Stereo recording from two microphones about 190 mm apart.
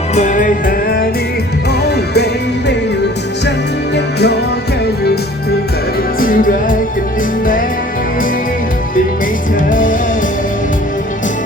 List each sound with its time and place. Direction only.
0.1 s music: 40° left (ahead or behind)
3.9 s music: 60° left (ahead or behind)
6.1 s music: 45° left (ahead or behind)
9.6 s music: 45° left (ahead or behind)